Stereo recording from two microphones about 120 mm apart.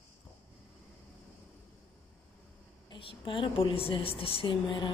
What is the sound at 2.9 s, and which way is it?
Speech, 45° left (ahead or behind).